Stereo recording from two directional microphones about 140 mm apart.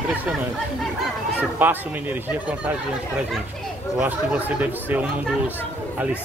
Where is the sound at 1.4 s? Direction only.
15° right (ahead or behind).